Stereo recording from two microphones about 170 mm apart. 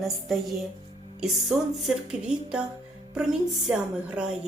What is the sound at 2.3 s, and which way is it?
A woman's voice, 5° right (ahead or behind).